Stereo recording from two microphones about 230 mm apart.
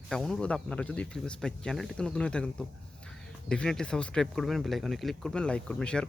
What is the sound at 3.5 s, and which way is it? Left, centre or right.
A man's voice, centre.